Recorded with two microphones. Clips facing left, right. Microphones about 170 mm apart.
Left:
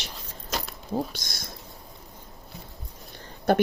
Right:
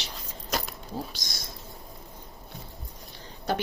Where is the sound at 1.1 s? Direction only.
55° left (ahead or behind).